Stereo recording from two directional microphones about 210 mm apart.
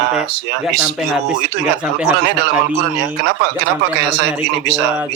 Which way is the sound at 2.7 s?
55° right (ahead or behind).